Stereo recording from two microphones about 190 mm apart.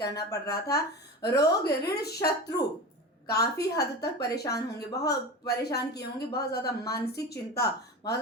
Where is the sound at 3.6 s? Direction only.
60° left (ahead or behind).